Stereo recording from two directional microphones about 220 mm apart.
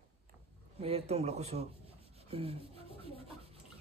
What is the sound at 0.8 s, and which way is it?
Speech, 30° right (ahead or behind).